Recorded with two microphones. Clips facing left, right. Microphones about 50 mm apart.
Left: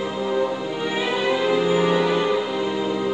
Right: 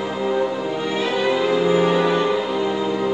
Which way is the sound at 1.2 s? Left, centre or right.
Centre.